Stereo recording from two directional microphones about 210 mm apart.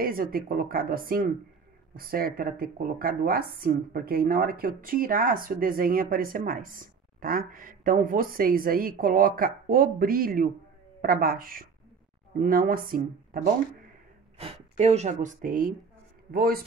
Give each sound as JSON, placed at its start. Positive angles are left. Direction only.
{"t": 0.0, "sound": "speech", "side_deg": -45}
{"t": 14.4, "sound": "speech", "side_deg": -30}